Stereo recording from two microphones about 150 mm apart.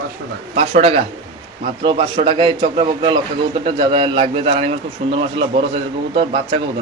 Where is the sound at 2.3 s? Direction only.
35° right (ahead or behind).